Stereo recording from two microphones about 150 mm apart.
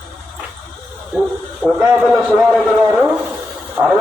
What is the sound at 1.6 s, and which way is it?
A man's voice, 5° right (ahead or behind).